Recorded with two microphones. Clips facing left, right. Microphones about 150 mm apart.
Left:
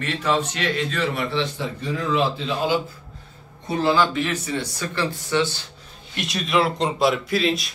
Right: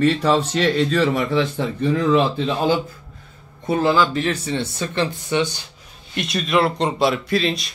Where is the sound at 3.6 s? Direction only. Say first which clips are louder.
Right 2 dB; 40° right (ahead or behind); by 5.6 s 20° right (ahead or behind).